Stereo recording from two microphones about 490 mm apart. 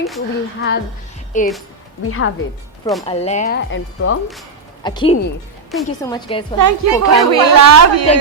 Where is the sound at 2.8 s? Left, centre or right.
Centre.